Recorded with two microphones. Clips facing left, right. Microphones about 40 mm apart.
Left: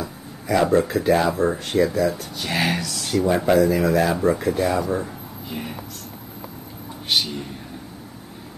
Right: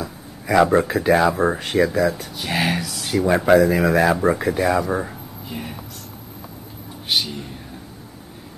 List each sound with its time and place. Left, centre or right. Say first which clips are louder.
0.5 s speech: right 2 dB; right
1.6 s speech: right 1 dB; right
2.0 s speech: right 2 dB; right
2.3 s speech: right 1 dB; centre
3.4 s speech: right 4 dB; right
5.5 s speech: even; centre
7.1 s speech: even; centre